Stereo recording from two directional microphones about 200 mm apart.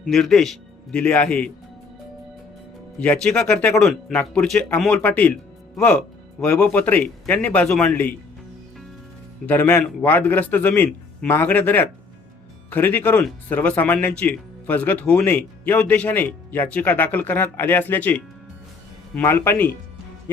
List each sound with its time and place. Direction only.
0.1 s speech: centre (ahead or behind)
3.0 s speech: 5° left (ahead or behind)
9.5 s speech: 10° left (ahead or behind)